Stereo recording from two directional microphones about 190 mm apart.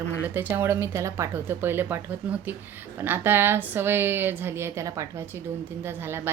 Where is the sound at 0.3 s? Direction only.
10° right (ahead or behind).